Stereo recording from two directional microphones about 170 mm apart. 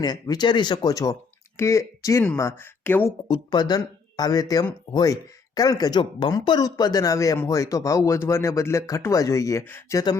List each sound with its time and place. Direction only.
0.0 s speech: 25° left (ahead or behind)
3.2 s speech: 25° left (ahead or behind)